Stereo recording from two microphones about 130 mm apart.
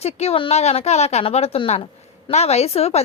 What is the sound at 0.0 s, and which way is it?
A woman's voice, 50° left (ahead or behind).